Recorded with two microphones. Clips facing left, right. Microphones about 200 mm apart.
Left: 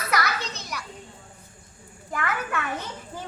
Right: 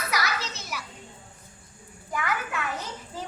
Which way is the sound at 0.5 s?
5° right (ahead or behind).